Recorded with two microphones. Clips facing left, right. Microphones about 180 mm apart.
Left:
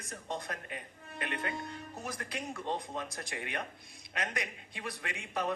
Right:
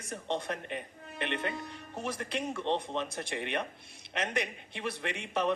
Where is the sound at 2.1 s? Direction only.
25° right (ahead or behind).